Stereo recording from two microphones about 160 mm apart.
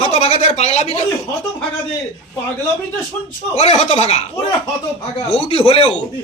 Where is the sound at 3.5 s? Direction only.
40° left (ahead or behind).